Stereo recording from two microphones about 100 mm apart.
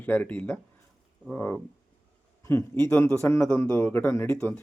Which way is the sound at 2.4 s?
25° left (ahead or behind).